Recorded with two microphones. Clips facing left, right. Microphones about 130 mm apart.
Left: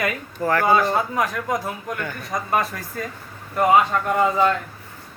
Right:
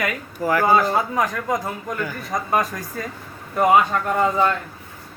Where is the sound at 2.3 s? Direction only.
15° right (ahead or behind).